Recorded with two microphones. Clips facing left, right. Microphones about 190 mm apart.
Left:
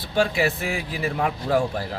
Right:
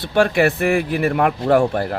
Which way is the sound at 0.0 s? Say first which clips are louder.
Right 6 dB; 70° right (ahead or behind).